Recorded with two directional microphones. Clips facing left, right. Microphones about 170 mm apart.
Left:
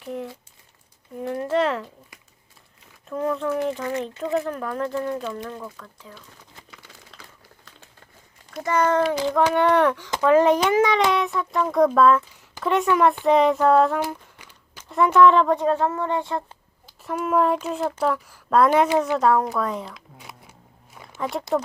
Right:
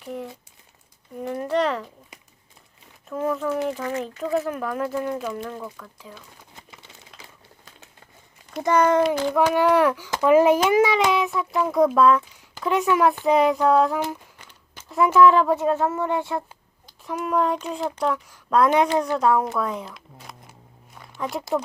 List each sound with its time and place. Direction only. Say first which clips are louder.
0.0 s crumpling: left 1 dB; centre (ahead or behind)
1.2 s speech: left 1 dB; centre (ahead or behind)
3.1 s speech: even; 5° right (ahead or behind)
6.6 s a sound: even; 20° right (ahead or behind)
8.6 s speech: right 2 dB; 15° right (ahead or behind)